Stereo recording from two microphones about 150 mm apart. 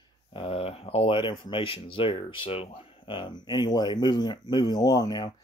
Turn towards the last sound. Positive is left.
turn(degrees=25)  # may be behind; listen again after turning